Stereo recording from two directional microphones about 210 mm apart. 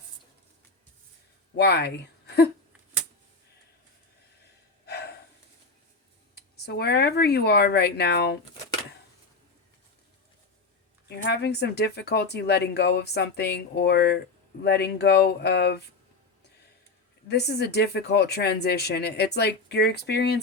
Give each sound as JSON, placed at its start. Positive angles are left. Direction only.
{"t": 1.5, "sound": "speech", "side_deg": 55}
{"t": 4.9, "sound": "snort", "side_deg": 50}
{"t": 6.3, "sound": "speech", "side_deg": 50}
{"t": 11.2, "sound": "speech", "side_deg": 50}
{"t": 17.2, "sound": "speech", "side_deg": 50}